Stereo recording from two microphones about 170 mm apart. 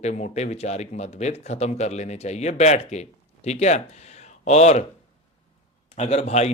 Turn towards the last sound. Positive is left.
turn(degrees=40)  # may be behind; listen again after turning